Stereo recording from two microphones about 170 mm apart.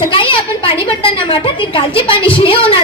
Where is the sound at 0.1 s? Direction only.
30° left (ahead or behind).